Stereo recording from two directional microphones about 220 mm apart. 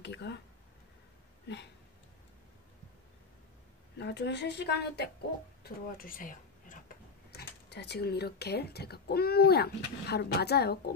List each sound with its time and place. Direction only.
0.0 s speech: 50° left (ahead or behind)
4.0 s speech: 50° left (ahead or behind)
7.3 s speech: 50° left (ahead or behind)